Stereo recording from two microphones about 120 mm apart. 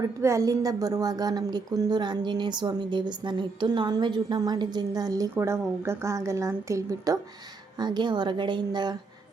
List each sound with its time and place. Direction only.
0.2 s a woman's voice: 25° right (ahead or behind)
7.8 s speech: 40° right (ahead or behind)